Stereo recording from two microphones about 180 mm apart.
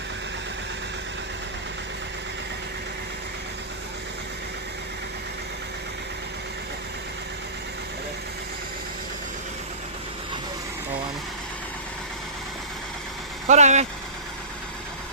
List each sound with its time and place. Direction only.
13.5 s speech: 40° right (ahead or behind)